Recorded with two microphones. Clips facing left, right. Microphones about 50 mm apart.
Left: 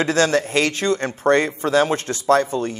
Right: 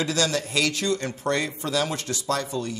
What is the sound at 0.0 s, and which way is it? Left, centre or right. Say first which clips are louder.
Speech: left 7 dB; left.